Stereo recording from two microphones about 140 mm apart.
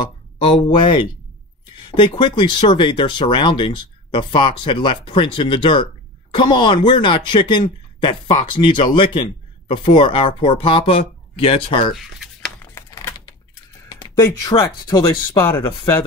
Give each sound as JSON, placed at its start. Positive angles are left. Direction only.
{"t": 0.0, "sound": "speech", "side_deg": 40}
{"t": 11.9, "sound": "a sound", "side_deg": 0}
{"t": 12.7, "sound": "typing", "side_deg": 20}
{"t": 13.8, "sound": "a sound", "side_deg": 25}
{"t": 14.5, "sound": "speech", "side_deg": 40}
{"t": 15.0, "sound": "speech", "side_deg": 20}